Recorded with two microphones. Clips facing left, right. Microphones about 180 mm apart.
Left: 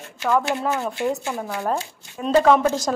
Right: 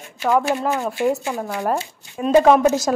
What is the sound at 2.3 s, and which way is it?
Speech, 15° right (ahead or behind).